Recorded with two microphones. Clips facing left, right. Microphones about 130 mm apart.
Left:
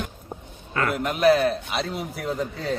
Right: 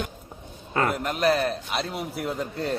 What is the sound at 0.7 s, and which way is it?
Speech, 30° right (ahead or behind).